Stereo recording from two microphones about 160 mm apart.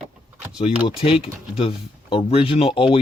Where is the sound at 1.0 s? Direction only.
35° left (ahead or behind).